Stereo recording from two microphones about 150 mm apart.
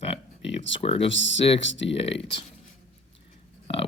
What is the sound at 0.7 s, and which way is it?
Speech, 40° left (ahead or behind).